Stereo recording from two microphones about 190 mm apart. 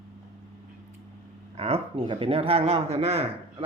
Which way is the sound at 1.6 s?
30° right (ahead or behind).